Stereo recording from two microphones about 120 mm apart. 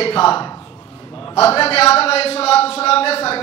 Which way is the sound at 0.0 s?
55° left (ahead or behind).